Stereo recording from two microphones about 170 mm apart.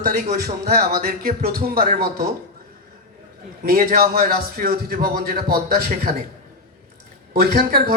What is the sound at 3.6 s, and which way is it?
Speech, 55° right (ahead or behind).